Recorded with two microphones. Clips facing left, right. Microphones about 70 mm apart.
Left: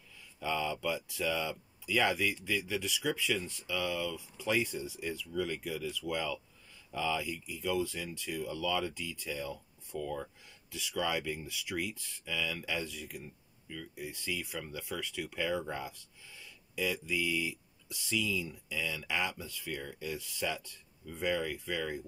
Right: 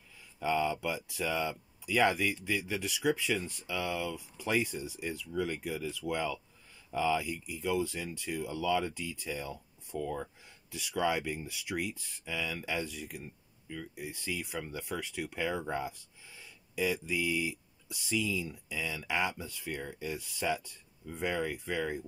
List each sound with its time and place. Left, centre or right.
0.4 s speech: centre
6.9 s speech: right
7.2 s speech: centre
9.9 s speech: centre
14.0 s speech: centre
18.7 s speech: centre